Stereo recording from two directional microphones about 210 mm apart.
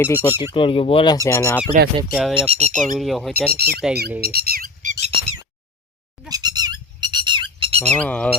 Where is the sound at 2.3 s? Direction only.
30° right (ahead or behind).